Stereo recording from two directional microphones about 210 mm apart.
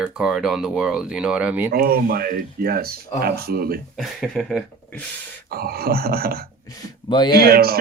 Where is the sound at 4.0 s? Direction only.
Centre (ahead or behind).